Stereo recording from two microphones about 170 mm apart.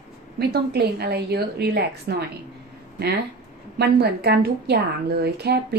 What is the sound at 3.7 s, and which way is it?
A woman's voice, 70° right (ahead or behind).